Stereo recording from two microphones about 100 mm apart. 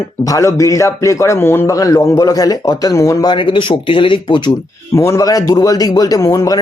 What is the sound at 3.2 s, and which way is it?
Speech, 55° left (ahead or behind).